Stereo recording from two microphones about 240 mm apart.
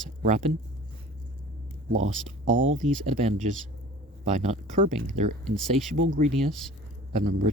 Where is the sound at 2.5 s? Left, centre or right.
Right.